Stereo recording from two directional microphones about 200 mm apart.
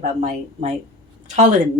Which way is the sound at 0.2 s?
35° right (ahead or behind).